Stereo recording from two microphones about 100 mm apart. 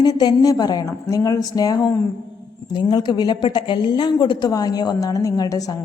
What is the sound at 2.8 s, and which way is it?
Speech, 45° left (ahead or behind).